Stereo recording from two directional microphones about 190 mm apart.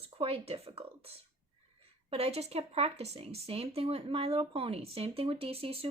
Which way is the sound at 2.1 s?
35° right (ahead or behind).